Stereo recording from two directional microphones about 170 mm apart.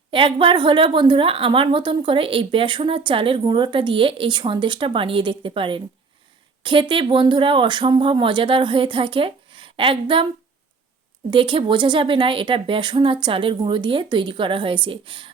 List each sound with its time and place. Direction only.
0.1 s a woman's voice: 30° right (ahead or behind)
11.3 s a woman's voice: 30° right (ahead or behind)